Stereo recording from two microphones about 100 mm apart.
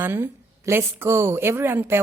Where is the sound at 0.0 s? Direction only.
20° right (ahead or behind).